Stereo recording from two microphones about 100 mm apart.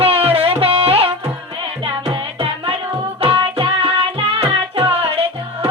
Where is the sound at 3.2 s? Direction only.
65° right (ahead or behind).